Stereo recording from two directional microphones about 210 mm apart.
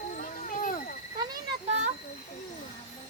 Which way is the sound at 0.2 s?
40° left (ahead or behind).